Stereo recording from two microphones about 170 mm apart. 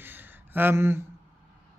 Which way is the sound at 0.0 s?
10° right (ahead or behind).